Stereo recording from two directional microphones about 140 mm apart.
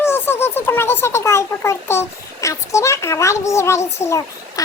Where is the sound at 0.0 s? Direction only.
15° left (ahead or behind).